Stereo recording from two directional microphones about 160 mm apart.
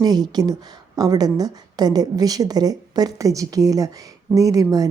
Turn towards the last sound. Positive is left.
turn(degrees=-20)  # may be behind; listen again after turning